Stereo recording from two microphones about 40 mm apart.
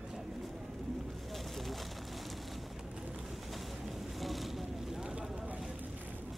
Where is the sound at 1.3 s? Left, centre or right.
Centre.